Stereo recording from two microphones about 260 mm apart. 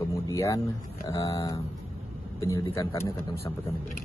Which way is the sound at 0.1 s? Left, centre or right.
Centre.